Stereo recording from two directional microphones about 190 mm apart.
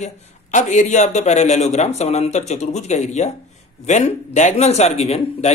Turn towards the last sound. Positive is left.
turn(degrees=35)  # may be behind; listen again after turning